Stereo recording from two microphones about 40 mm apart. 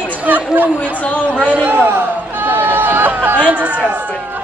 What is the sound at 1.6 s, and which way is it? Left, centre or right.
Chatter, right.